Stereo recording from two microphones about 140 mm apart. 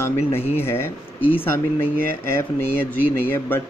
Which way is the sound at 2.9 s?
15° left (ahead or behind).